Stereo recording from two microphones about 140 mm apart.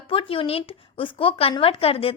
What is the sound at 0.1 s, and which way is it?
A woman's voice, 40° left (ahead or behind).